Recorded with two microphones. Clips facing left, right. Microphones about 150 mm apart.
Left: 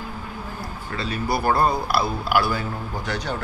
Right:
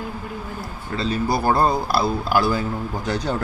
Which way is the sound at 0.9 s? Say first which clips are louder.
Right 4 dB; 30° right (ahead or behind).